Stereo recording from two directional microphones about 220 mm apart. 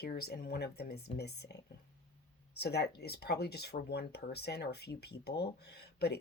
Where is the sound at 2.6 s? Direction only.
50° left (ahead or behind).